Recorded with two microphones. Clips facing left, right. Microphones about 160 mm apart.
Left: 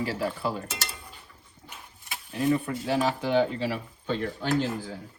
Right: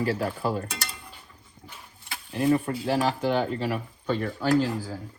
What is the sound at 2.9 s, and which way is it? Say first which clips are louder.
Speech: even; 45° right (ahead or behind).